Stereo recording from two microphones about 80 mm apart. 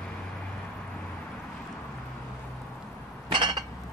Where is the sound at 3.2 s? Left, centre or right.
Right.